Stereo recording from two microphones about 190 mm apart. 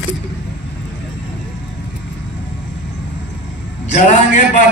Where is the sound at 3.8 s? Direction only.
40° left (ahead or behind).